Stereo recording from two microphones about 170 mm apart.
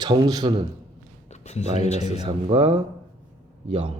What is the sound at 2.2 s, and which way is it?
Speech, 40° right (ahead or behind).